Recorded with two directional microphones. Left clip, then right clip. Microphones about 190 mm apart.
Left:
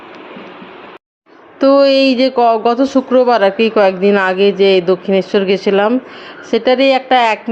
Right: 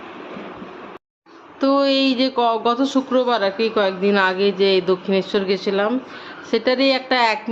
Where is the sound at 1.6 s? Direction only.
25° left (ahead or behind).